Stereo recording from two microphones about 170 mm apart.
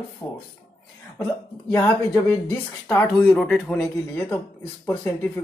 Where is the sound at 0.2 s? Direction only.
10° left (ahead or behind).